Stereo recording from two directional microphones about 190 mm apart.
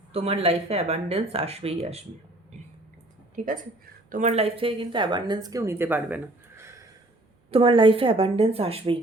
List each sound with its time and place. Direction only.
0.1 s speech: 30° right (ahead or behind)
3.3 s speech: 45° right (ahead or behind); by 6.7 s 10° right (ahead or behind)
7.5 s speech: 25° right (ahead or behind)